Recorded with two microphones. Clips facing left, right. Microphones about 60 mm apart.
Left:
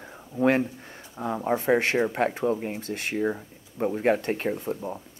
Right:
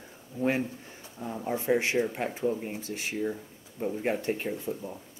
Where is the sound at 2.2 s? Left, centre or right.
Left.